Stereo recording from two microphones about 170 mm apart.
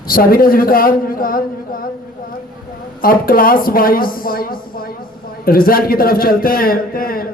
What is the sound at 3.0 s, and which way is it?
A man's voice, 55° left (ahead or behind).